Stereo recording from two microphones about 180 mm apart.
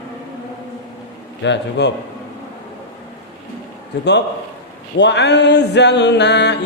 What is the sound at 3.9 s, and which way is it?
Music, 70° left (ahead or behind).